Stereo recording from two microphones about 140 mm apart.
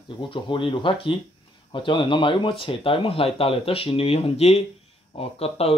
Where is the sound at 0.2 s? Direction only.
35° left (ahead or behind).